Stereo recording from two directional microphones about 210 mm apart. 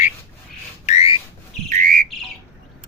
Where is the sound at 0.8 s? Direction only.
30° left (ahead or behind).